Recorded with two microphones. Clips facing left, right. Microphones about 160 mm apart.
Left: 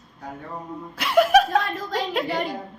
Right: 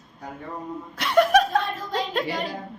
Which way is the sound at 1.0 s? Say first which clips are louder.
Left 1 dB; 5° left (ahead or behind).